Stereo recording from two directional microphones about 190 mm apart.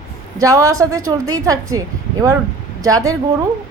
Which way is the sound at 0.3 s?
15° right (ahead or behind).